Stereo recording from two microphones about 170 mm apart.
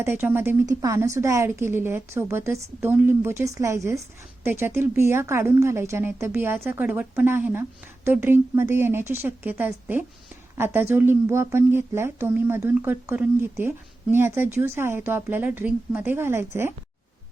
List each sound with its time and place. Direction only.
0.0 s speech: 10° right (ahead or behind)